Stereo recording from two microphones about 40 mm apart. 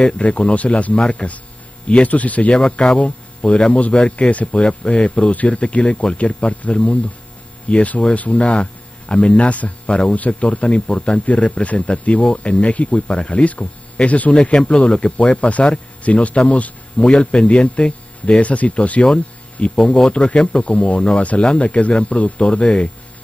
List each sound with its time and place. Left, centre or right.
0.2 s speech: left
2.5 s a man's voice: left
14.3 s speech: left
16.9 s speech: left
21.2 s speech: left